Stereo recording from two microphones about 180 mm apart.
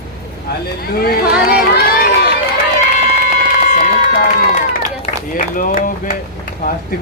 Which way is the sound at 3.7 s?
50° left (ahead or behind).